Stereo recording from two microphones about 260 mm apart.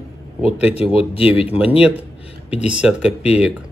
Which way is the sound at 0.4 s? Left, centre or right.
Left.